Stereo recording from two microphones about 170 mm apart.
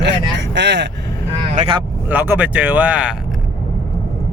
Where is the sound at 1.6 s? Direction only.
30° right (ahead or behind).